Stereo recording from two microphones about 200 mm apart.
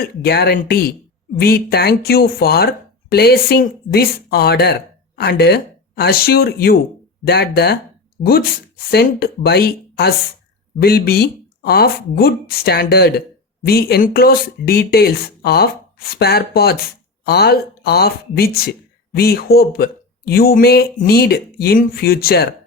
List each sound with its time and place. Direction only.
0.0 s a woman's voice: 50° left (ahead or behind)